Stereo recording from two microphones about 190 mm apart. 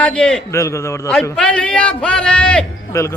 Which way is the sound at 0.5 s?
15° left (ahead or behind).